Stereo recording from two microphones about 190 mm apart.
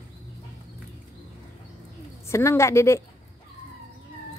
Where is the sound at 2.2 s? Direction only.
15° left (ahead or behind).